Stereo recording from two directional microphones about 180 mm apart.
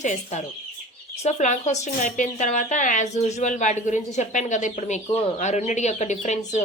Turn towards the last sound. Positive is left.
turn(degrees=40)  # may be behind; listen again after turning